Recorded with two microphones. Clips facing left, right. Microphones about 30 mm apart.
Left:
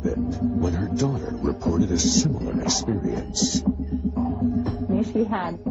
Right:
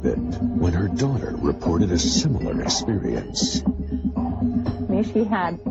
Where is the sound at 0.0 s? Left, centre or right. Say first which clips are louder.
Right 2 dB; right.